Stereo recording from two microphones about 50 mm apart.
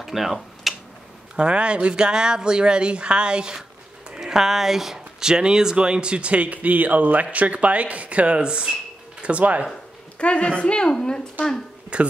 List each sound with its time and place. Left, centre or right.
0.0 s a sound: centre
1.3 s speech: centre
9.2 s speech: right
10.1 s speech: left
11.9 s speech: right